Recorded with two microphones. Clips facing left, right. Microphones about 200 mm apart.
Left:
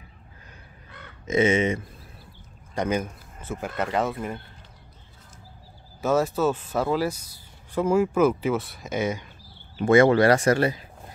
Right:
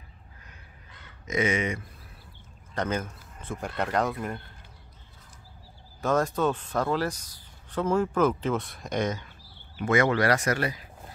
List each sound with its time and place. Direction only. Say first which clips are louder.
1.2 s speech: left 6 dB; 25° left (ahead or behind)
2.7 s speech: left 4 dB; 10° left (ahead or behind)
5.9 s speech: left 3 dB; 5° left (ahead or behind)
9.8 s speech: left 7 dB; 30° left (ahead or behind)